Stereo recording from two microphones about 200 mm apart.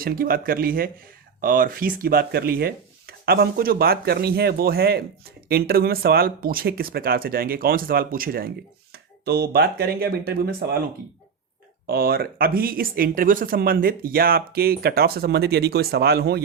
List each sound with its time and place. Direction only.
0.0 s speech: 45° right (ahead or behind)
11.9 s speech: 50° right (ahead or behind)